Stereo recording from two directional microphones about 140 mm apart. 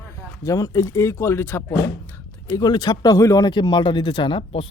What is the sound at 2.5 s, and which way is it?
Speech, 30° left (ahead or behind).